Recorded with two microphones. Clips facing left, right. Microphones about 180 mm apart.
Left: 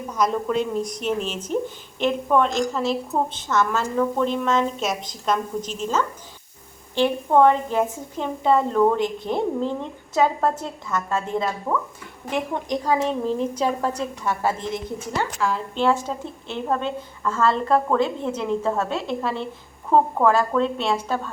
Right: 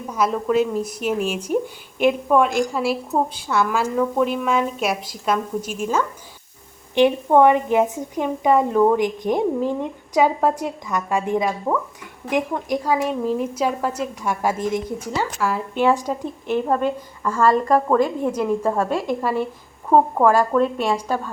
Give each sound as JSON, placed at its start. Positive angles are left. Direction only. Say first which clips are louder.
{"t": 0.1, "sound": "a woman's voice", "louder": "right 3 dB", "side_deg": -5}